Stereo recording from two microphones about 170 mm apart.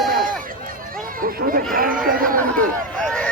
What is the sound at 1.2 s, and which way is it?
Chatter, 55° right (ahead or behind).